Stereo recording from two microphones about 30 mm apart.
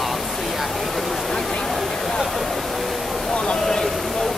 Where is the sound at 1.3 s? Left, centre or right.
Left.